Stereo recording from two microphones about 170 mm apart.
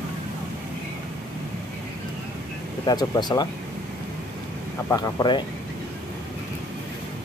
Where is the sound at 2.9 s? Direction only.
25° left (ahead or behind).